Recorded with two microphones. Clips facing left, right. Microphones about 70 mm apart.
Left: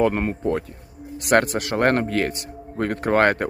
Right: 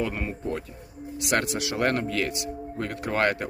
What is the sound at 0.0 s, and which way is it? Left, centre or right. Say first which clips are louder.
A man's voice: left 9 dB; left.